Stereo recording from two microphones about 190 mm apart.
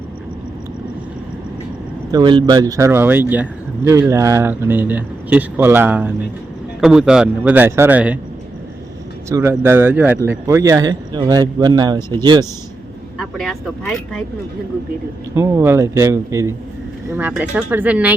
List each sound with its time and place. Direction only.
2.1 s a man's voice: 25° right (ahead or behind); by 8.2 s 10° right (ahead or behind)
9.3 s a man's voice: 15° right (ahead or behind)
13.1 s speech: centre (ahead or behind)
15.4 s a man's voice: 15° right (ahead or behind)